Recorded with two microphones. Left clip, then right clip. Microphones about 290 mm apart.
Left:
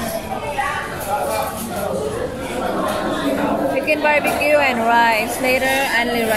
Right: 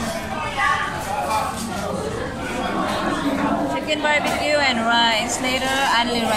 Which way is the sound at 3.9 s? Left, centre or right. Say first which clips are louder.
Left 3 dB; right.